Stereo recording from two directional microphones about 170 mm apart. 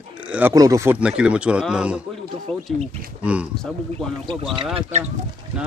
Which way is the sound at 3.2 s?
5° right (ahead or behind).